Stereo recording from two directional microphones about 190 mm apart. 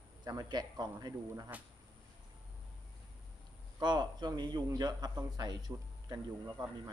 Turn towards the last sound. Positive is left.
turn(degrees=-15)  # may be behind; listen again after turning